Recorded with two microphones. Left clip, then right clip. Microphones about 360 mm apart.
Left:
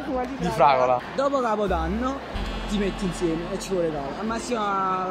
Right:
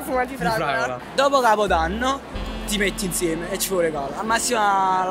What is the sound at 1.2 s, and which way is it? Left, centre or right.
Speech, right.